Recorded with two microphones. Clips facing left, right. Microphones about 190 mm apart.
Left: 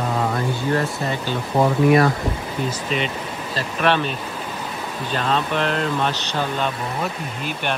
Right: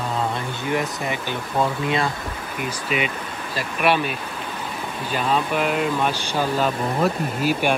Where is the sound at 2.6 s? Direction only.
10° right (ahead or behind).